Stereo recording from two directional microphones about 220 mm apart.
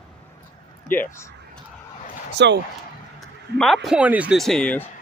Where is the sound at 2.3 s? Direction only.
50° right (ahead or behind).